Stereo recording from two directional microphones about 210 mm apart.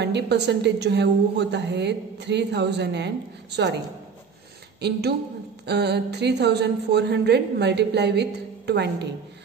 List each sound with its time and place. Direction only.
0.0 s a woman's voice: 55° right (ahead or behind)
4.8 s a woman's voice: 50° right (ahead or behind)